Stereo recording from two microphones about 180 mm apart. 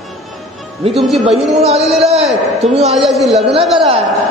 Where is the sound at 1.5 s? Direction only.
35° right (ahead or behind).